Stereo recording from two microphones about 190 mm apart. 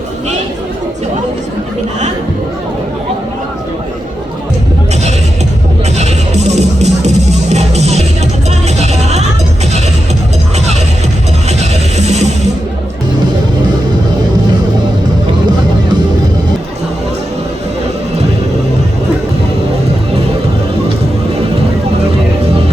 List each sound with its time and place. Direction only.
6.0 s music: 35° right (ahead or behind)
8.4 s vehicle: 35° right (ahead or behind)
11.4 s music: 35° right (ahead or behind)